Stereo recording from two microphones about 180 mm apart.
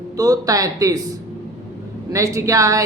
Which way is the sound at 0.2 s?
20° right (ahead or behind).